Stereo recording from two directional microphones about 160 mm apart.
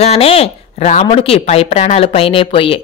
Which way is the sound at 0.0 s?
40° left (ahead or behind).